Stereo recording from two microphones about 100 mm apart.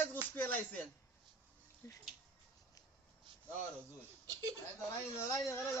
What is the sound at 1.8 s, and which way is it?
Speech, 30° left (ahead or behind).